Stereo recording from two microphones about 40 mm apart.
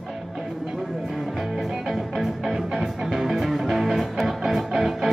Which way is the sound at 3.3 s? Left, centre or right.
Centre.